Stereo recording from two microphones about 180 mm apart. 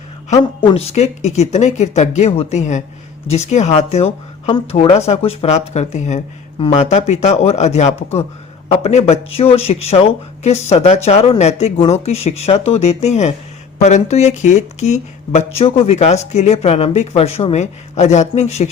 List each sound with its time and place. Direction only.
0.6 s speech: 30° left (ahead or behind)